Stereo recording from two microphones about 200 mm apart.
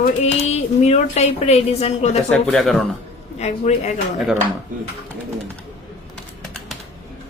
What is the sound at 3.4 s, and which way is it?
Speech, 35° left (ahead or behind).